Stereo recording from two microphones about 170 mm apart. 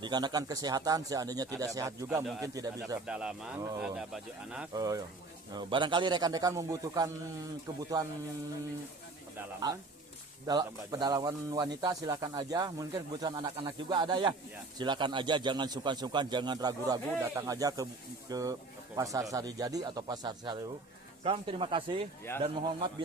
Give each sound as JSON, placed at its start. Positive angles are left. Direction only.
{"t": 0.0, "sound": "a man's voice", "side_deg": -25}
{"t": 3.1, "sound": "speech", "side_deg": -5}
{"t": 4.7, "sound": "a man's voice", "side_deg": -20}
{"t": 10.4, "sound": "a man's voice", "side_deg": -20}